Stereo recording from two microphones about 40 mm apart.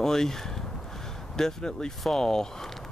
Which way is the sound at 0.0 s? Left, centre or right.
Centre.